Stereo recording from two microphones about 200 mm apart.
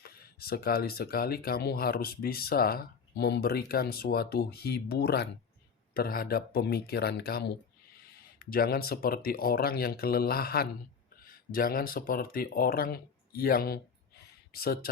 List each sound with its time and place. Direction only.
0.0 s speech: 50° left (ahead or behind)